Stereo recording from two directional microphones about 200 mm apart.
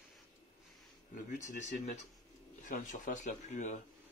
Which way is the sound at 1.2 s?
40° left (ahead or behind).